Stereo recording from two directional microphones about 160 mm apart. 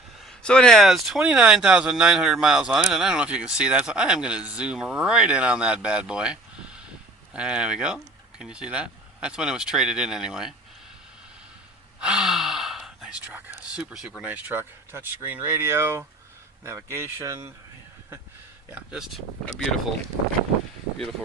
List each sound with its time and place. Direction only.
0.2 s speech: 5° left (ahead or behind)
11.9 s speech: 5° right (ahead or behind)
18.7 s speech: 5° right (ahead or behind)